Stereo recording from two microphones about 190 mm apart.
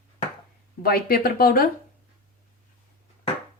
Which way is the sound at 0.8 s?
50° left (ahead or behind).